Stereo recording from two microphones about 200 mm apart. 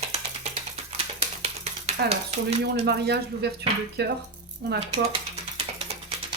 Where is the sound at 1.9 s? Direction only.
30° right (ahead or behind).